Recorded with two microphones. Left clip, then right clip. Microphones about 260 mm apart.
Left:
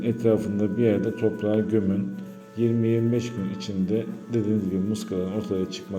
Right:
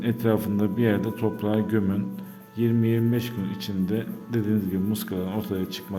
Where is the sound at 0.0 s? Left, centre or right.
Centre.